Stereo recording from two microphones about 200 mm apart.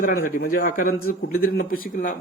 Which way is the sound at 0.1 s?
45° left (ahead or behind).